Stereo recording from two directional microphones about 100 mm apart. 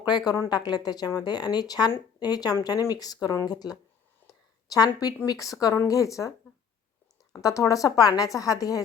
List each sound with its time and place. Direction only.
0.0 s speech: 45° left (ahead or behind)
4.3 s a sound: 35° left (ahead or behind)
4.9 s speech: 40° left (ahead or behind)
7.3 s speech: 35° left (ahead or behind)